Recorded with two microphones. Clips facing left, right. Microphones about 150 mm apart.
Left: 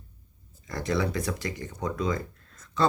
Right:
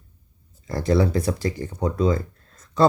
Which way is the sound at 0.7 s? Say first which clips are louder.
Right 7 dB; 35° right (ahead or behind).